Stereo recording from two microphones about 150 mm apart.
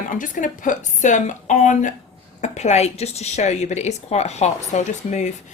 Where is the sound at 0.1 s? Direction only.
60° left (ahead or behind).